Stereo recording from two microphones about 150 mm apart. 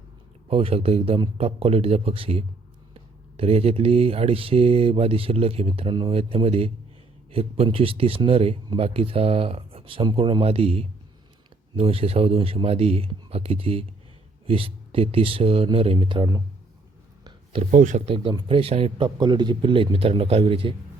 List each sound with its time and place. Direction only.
0.4 s speech: 40° right (ahead or behind)
17.2 s a sound: 40° right (ahead or behind)
17.7 s speech: 55° right (ahead or behind)
18.0 s speech: 35° right (ahead or behind)